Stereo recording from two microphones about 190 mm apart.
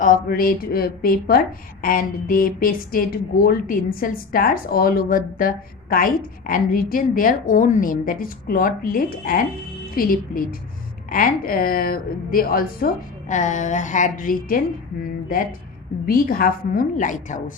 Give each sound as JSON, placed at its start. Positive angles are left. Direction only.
{"t": 0.0, "sound": "a woman's voice", "side_deg": 50}